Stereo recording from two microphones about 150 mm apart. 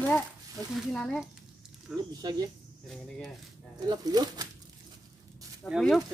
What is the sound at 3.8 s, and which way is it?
Speech, 25° right (ahead or behind).